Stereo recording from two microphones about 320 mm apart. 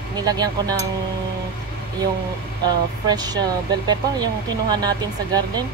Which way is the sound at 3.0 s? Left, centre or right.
Centre.